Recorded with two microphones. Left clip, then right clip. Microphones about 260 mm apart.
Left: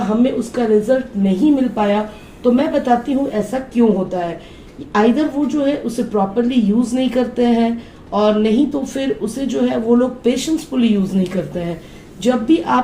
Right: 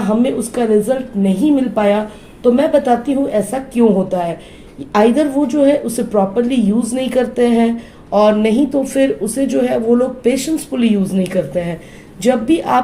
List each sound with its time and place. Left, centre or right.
0.2 s speech: right